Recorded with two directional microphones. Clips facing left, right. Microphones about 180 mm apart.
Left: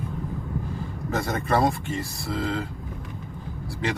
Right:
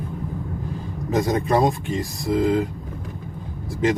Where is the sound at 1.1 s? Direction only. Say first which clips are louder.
Right 5 dB; 15° right (ahead or behind).